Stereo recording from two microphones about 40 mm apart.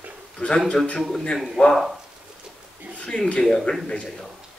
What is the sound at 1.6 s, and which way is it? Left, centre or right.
Speech, centre.